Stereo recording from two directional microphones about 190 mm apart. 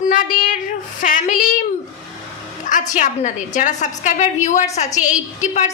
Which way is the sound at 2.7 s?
40° left (ahead or behind).